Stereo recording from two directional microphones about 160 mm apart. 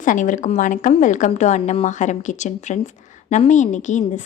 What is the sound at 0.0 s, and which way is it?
A woman's voice, 55° left (ahead or behind).